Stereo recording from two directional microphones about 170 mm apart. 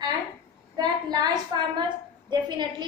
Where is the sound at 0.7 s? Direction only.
25° right (ahead or behind).